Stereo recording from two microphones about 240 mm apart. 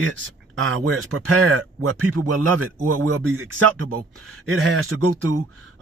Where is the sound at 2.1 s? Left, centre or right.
Right.